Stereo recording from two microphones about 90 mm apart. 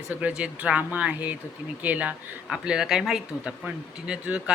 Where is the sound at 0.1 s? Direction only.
15° right (ahead or behind).